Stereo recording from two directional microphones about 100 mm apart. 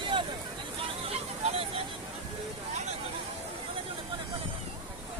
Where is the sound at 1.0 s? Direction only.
85° right.